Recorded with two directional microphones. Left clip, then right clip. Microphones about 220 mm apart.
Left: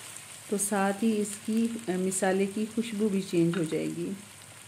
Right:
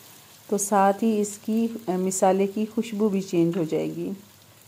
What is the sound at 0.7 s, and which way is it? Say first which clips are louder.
Speech: right 9 dB; 15° right (ahead or behind).